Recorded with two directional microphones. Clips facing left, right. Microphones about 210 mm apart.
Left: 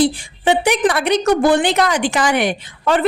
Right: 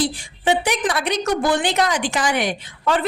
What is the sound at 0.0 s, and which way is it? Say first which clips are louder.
A woman's voice: left 6 dB; 60° left (ahead or behind).